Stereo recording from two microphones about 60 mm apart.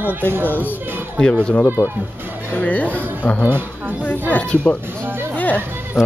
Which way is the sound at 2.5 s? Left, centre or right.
Left.